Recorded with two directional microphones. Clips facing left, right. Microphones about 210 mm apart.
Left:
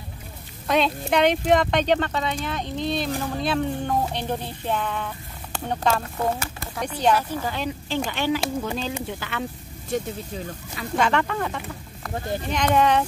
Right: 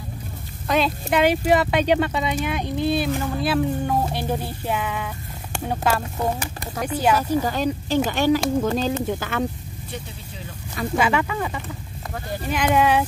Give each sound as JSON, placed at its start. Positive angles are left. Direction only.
{"t": 0.7, "sound": "speech", "side_deg": 0}
{"t": 6.1, "sound": "speech", "side_deg": -15}
{"t": 7.4, "sound": "speech", "side_deg": -40}
{"t": 11.0, "sound": "speech", "side_deg": -5}